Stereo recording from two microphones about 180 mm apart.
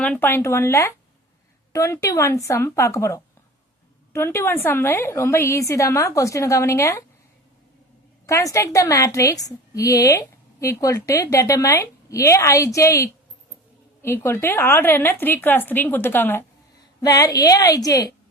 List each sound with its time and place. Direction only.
0.0 s a woman's voice: 10° left (ahead or behind)
8.3 s a woman's voice: 15° left (ahead or behind)